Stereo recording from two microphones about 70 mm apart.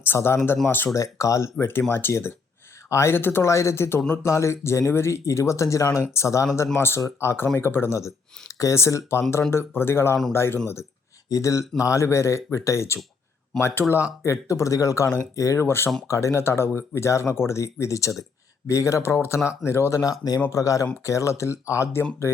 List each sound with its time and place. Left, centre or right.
0.0 s speech: left
0.9 s speech: left
6.7 s speech: left
7.9 s speech: left
11.3 s speech: left
15.6 s speech: left
16.0 s speech: left
20.0 s speech: left